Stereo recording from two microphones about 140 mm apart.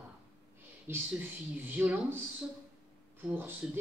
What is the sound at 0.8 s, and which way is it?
Speech, 15° right (ahead or behind).